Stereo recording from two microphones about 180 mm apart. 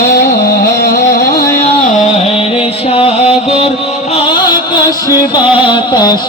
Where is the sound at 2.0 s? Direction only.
35° left (ahead or behind).